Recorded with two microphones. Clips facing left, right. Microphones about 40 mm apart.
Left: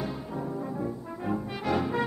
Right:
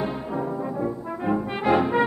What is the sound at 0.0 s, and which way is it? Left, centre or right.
Brass instrument, right.